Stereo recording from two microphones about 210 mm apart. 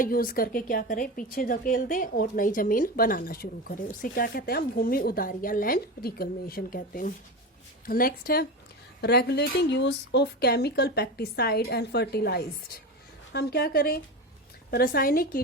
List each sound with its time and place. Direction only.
0.0 s speech: 45° left (ahead or behind)